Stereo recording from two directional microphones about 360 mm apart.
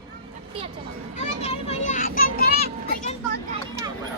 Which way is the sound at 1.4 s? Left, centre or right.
Centre.